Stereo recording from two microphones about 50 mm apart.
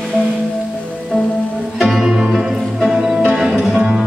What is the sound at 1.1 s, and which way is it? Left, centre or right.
Music, centre.